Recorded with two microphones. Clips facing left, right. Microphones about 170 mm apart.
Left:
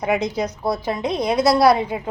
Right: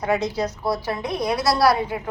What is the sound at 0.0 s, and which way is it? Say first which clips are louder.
A woman's voice: left 1 dB; 20° left (ahead or behind).